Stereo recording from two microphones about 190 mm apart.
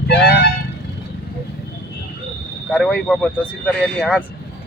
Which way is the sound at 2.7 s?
5° left (ahead or behind).